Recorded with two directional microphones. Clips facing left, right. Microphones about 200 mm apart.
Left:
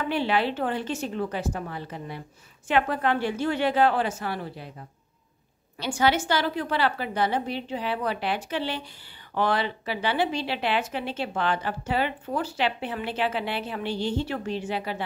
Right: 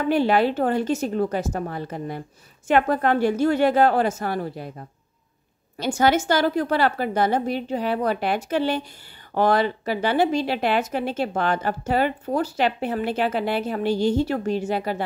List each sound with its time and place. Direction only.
0.1 s speech: 45° right (ahead or behind)